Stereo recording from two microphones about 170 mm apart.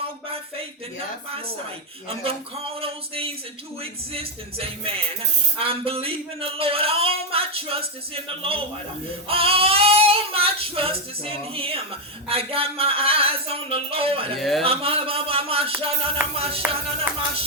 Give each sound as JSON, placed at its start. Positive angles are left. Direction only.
{"t": 2.8, "sound": "a man's voice", "side_deg": -35}
{"t": 14.3, "sound": "speech", "side_deg": 0}
{"t": 14.6, "sound": "a man's voice", "side_deg": -35}